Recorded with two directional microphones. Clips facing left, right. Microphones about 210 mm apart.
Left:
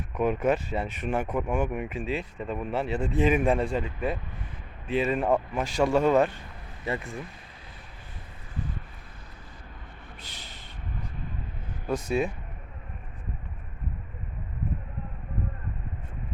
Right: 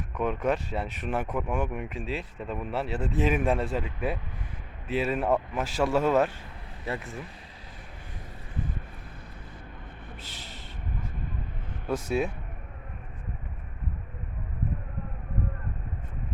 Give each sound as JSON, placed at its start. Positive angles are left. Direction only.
{"t": 0.1, "sound": "speech", "side_deg": 5}
{"t": 10.2, "sound": "a sound", "side_deg": 0}
{"t": 11.9, "sound": "speech", "side_deg": -5}